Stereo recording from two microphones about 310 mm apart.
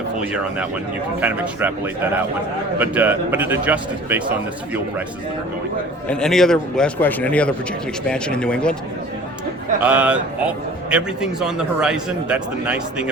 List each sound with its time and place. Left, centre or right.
0.2 s a man's voice: centre
2.7 s a man's voice: centre
6.1 s a man's voice: centre
9.8 s a man's voice: centre